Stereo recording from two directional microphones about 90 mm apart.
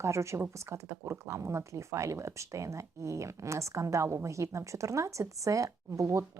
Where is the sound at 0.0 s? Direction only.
35° right (ahead or behind).